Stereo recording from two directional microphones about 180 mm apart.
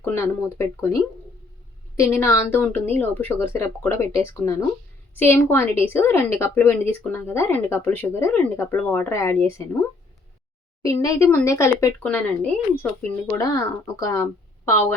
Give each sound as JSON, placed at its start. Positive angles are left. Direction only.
{"t": 0.0, "sound": "a woman's voice", "side_deg": 15}
{"t": 2.0, "sound": "a woman's voice", "side_deg": 15}
{"t": 10.8, "sound": "a woman's voice", "side_deg": 15}